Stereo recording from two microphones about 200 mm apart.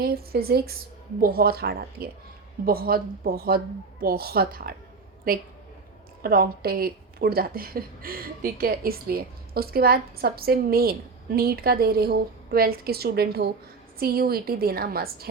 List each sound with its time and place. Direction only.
0.0 s a woman's voice: 50° right (ahead or behind)
6.2 s a woman's voice: 50° right (ahead or behind)